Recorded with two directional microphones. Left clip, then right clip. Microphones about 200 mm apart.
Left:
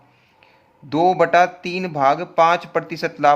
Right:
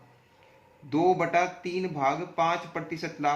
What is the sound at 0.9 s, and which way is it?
A man's voice, 60° left (ahead or behind).